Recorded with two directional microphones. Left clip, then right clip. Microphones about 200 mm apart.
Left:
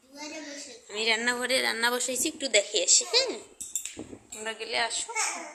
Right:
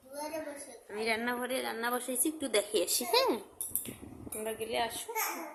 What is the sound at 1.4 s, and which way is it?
Speech, 10° left (ahead or behind).